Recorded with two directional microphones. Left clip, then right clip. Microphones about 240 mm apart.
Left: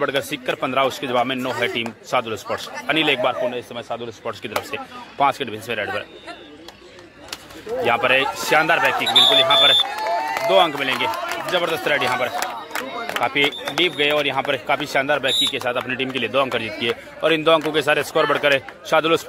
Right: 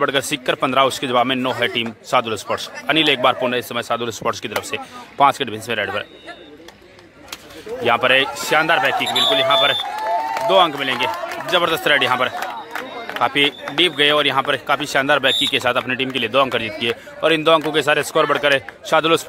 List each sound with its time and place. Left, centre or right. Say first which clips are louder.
0.0 s speech: right 3 dB; centre
3.4 s speech: right 5 dB; right
4.2 s speech: right 4 dB; centre
7.8 s speech: right 2 dB; centre
12.4 s a sound: even; left
13.2 s speech: right 3 dB; centre